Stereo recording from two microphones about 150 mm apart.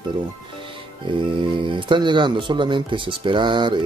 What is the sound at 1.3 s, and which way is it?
Speech, 35° right (ahead or behind).